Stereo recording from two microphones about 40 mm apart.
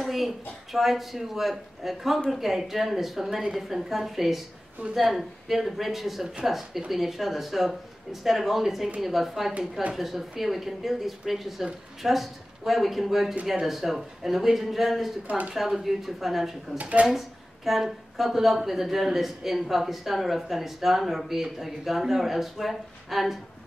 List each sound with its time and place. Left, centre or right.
0.1 s speech: centre
4.8 s speech: right
5.1 s speech: centre
15.2 s speech: right
15.5 s speech: centre
17.6 s speech: centre